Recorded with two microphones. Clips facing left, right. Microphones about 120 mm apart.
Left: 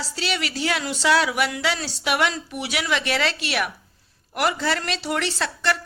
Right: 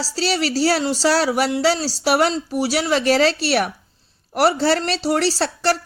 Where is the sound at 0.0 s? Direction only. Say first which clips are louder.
Right 6 dB; 35° right (ahead or behind).